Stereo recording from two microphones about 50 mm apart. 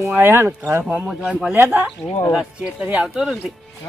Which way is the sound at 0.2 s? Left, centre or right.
Right.